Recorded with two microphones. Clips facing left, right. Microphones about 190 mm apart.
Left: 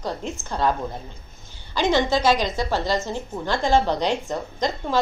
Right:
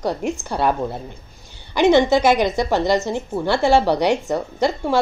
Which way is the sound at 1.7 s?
15° right (ahead or behind).